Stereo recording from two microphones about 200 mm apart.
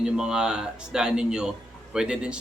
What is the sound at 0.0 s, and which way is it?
Speech, 5° right (ahead or behind).